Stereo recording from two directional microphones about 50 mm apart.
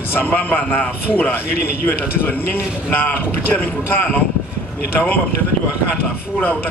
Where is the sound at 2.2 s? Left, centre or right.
Left.